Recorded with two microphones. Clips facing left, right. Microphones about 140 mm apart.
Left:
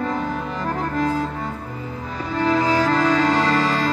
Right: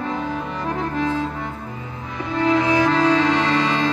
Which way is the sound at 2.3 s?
40° left (ahead or behind).